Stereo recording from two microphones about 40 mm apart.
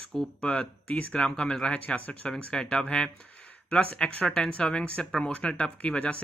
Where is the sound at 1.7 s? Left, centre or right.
Left.